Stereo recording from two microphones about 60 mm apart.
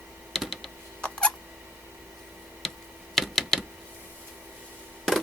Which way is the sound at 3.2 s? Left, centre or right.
Centre.